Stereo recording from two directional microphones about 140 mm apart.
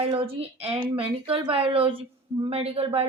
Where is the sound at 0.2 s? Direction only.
45° right (ahead or behind).